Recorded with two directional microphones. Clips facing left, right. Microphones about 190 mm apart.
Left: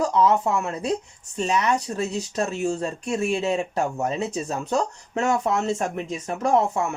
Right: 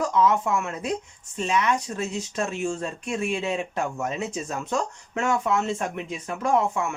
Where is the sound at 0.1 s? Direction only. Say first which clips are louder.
Left 2 dB; 35° left (ahead or behind).